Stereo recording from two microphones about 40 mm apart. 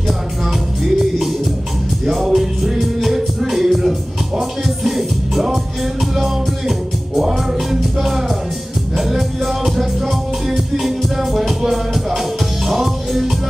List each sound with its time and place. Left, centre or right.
2.0 s music: centre
7.2 s music: centre